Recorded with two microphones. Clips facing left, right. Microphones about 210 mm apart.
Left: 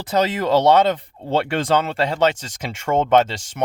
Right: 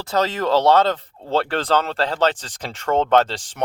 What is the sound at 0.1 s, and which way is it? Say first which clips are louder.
Speech: left 1 dB; 15° left (ahead or behind).